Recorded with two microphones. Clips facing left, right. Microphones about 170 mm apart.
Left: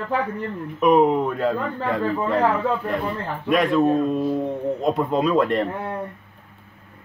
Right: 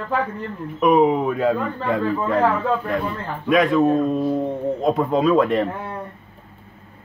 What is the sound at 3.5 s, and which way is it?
A man's voice, centre (ahead or behind).